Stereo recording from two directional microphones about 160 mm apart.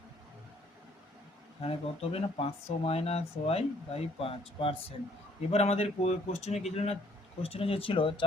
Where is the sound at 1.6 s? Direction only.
40° left (ahead or behind).